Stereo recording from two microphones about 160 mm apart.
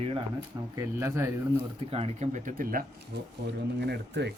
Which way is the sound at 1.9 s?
40° right (ahead or behind).